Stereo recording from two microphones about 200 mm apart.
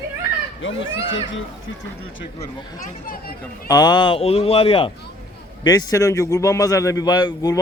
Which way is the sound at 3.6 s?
20° left (ahead or behind).